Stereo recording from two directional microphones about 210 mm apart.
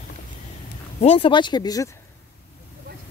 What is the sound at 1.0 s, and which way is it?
Speech, 25° left (ahead or behind).